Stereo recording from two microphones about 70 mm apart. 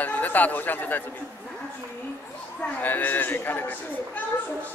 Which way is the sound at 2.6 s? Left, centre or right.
Left.